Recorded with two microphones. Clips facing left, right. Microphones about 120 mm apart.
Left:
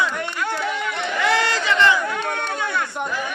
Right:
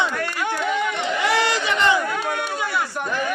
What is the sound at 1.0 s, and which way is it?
Speech, 25° right (ahead or behind).